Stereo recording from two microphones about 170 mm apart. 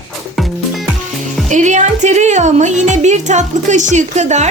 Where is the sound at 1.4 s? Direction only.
45° right (ahead or behind).